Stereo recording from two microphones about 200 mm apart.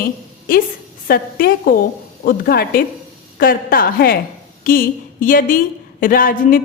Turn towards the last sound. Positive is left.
turn(degrees=45)  # may be behind; listen again after turning